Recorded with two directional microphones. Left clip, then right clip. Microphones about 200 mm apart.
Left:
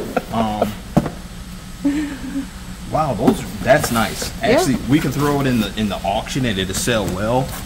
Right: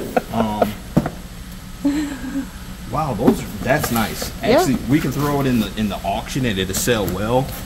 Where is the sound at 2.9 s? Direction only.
5° left (ahead or behind).